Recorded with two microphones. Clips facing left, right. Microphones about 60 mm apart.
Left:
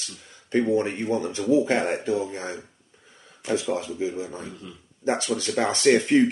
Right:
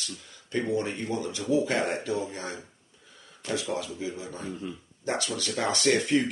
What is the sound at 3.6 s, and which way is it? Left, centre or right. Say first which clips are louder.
Speech: left 5 dB; left.